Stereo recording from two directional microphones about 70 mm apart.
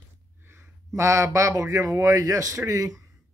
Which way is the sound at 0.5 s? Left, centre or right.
Right.